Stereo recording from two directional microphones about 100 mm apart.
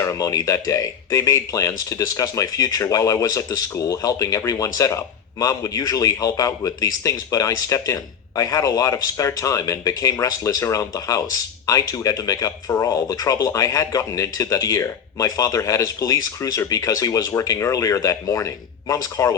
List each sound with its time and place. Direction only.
0.0 s a man's voice: 30° left (ahead or behind)